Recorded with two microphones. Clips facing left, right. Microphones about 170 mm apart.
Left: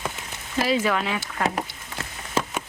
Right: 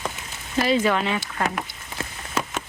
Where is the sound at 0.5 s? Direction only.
5° left (ahead or behind).